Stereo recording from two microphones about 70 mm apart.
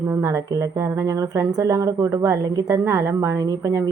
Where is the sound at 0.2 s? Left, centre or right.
Right.